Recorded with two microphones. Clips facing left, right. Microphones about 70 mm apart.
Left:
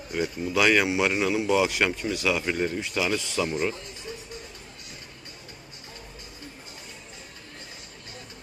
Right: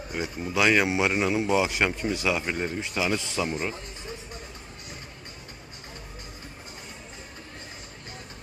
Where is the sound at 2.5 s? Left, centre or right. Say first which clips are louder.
Left 2 dB; centre.